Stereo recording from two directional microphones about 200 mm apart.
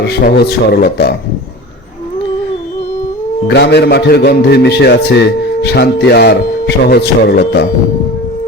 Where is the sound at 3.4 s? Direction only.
55° left (ahead or behind).